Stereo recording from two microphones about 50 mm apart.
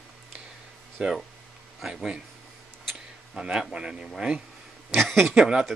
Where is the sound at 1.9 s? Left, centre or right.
Centre.